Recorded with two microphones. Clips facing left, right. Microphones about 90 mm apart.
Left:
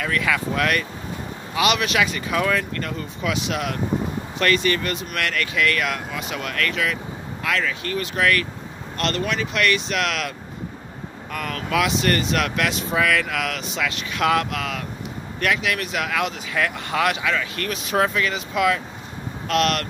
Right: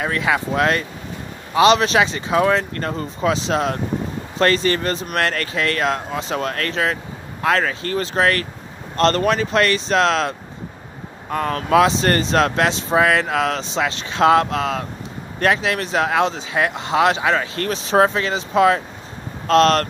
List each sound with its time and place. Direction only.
0.0 s speech: 25° right (ahead or behind)